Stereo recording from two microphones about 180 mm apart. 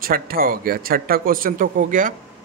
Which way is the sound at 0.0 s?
55° right (ahead or behind).